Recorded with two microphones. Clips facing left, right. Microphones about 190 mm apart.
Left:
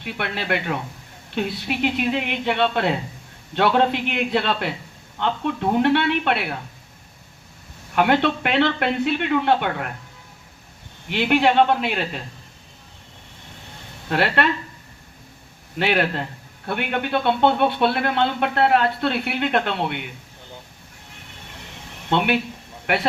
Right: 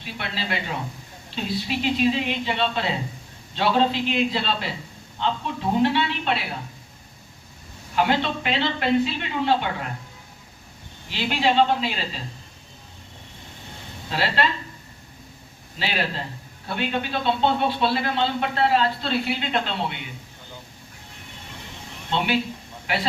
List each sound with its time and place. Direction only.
0.0 s speech: 60° left (ahead or behind)
7.9 s speech: 60° left (ahead or behind)
11.1 s speech: 60° left (ahead or behind)
14.1 s speech: 60° left (ahead or behind)
15.8 s speech: 60° left (ahead or behind)
22.1 s speech: 60° left (ahead or behind)